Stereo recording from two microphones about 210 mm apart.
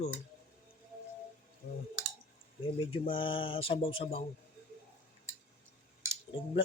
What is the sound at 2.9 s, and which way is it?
Speech, 25° left (ahead or behind).